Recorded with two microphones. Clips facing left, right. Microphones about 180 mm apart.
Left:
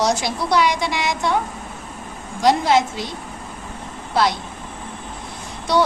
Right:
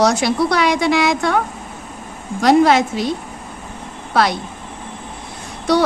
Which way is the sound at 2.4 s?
65° right (ahead or behind).